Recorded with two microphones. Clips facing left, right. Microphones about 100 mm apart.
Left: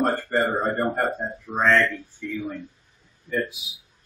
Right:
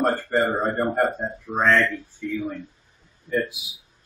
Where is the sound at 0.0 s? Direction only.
Centre (ahead or behind).